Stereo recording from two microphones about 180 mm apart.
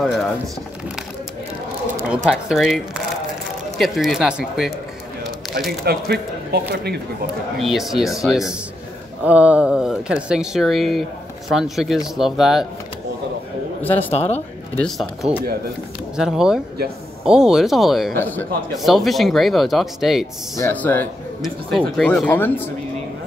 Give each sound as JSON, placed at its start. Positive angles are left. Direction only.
{"t": 0.0, "sound": "speech", "side_deg": 0}
{"t": 2.0, "sound": "speech", "side_deg": 0}
{"t": 5.9, "sound": "speech", "side_deg": -60}
{"t": 7.5, "sound": "speech", "side_deg": 0}
{"t": 13.9, "sound": "speech", "side_deg": 35}
{"t": 14.8, "sound": "speech", "side_deg": 0}
{"t": 18.1, "sound": "speech", "side_deg": 10}
{"t": 18.8, "sound": "speech", "side_deg": 0}
{"t": 20.5, "sound": "speech", "side_deg": 10}